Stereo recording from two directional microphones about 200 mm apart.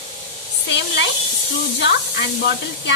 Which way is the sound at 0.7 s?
60° left (ahead or behind).